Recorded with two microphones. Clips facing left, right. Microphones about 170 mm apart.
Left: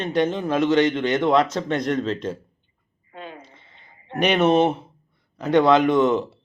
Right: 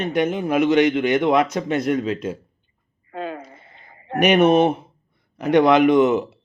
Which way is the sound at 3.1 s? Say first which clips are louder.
Right 9 dB; 45° right (ahead or behind).